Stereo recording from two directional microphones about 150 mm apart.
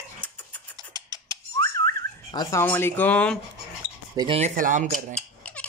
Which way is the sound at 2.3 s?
25° left (ahead or behind).